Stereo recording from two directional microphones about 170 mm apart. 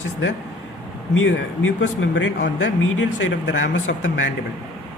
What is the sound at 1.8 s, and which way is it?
Speech, 90° left.